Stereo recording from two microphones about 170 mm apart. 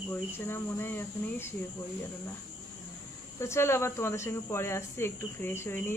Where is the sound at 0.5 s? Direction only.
15° left (ahead or behind).